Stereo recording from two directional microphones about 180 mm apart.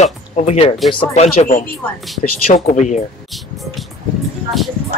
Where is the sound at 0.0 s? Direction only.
35° left (ahead or behind).